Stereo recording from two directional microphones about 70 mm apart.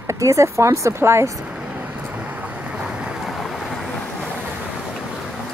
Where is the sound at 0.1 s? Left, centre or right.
Right.